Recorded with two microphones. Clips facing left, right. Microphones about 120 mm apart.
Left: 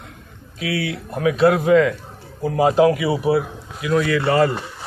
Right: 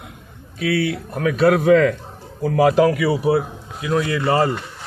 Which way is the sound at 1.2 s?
50° right (ahead or behind).